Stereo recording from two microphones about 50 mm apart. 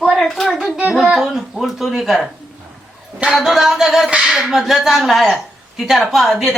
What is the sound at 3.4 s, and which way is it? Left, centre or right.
A woman's voice, centre.